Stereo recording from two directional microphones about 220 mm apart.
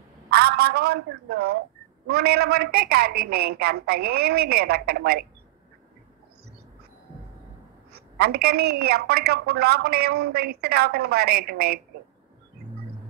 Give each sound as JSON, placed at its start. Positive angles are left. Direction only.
{"t": 0.3, "sound": "speech", "side_deg": -45}
{"t": 8.2, "sound": "speech", "side_deg": -45}